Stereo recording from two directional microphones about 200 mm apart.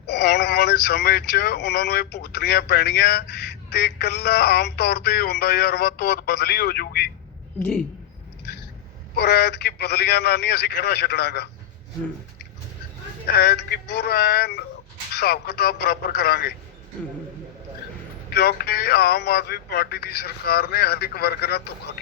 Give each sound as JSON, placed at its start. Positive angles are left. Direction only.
{"t": 0.1, "sound": "speech", "side_deg": 55}
{"t": 7.6, "sound": "speech", "side_deg": 5}
{"t": 9.1, "sound": "a man's voice", "side_deg": 55}
{"t": 13.2, "sound": "speech", "side_deg": 50}
{"t": 18.3, "sound": "speech", "side_deg": 50}